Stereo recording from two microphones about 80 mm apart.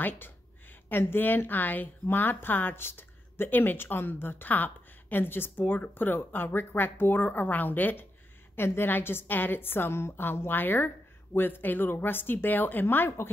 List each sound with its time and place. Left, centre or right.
0.8 s speech: left